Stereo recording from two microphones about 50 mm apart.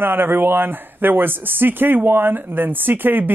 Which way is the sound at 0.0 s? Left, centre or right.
Right.